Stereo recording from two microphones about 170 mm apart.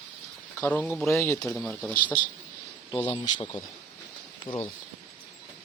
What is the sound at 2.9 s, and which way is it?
Speech, 25° left (ahead or behind).